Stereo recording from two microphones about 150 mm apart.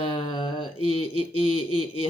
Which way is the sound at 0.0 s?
35° left (ahead or behind).